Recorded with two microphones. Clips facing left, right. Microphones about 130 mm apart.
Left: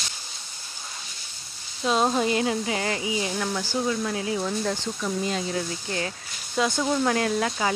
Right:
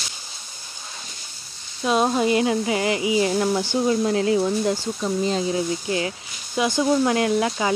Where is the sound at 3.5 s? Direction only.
25° right (ahead or behind).